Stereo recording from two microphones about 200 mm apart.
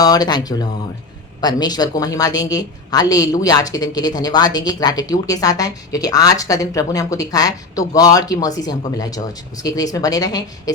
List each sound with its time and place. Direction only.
0.0 s a woman's voice: 20° left (ahead or behind)